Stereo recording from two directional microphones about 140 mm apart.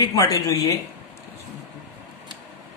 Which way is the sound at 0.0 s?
25° left (ahead or behind).